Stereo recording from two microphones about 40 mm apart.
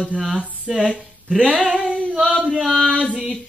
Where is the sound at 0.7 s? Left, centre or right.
Centre.